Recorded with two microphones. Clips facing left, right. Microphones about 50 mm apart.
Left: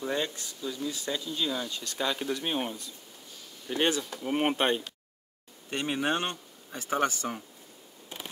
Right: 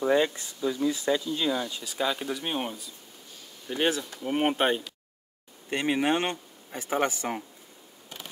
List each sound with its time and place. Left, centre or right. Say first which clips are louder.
0.0 s speech: right 8 dB; right
1.2 s speech: right 4 dB; centre
5.9 s speech: right 2 dB; right